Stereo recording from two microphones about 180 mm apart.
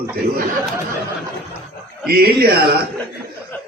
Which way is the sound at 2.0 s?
60° right (ahead or behind).